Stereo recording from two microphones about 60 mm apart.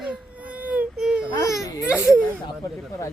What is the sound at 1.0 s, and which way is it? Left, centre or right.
Speech, centre.